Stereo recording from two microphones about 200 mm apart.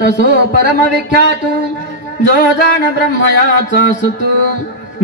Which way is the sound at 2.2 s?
50° left (ahead or behind).